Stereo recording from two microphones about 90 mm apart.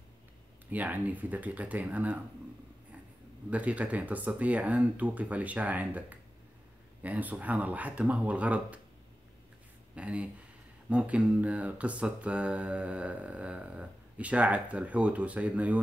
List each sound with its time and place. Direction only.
0.7 s mantra: 20° right (ahead or behind)
3.4 s mantra: 15° right (ahead or behind)
9.9 s mantra: 15° right (ahead or behind)